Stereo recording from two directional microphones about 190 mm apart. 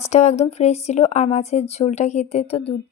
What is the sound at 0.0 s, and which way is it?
Speech, 35° left (ahead or behind).